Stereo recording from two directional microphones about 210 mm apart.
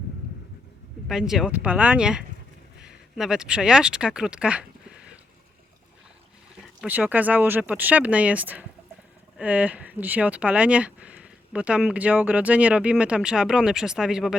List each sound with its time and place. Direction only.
1.0 s speech: centre (ahead or behind)
6.8 s speech: 10° right (ahead or behind)